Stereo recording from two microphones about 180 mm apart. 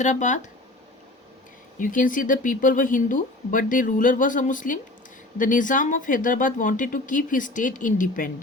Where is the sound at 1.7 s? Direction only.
50° left (ahead or behind).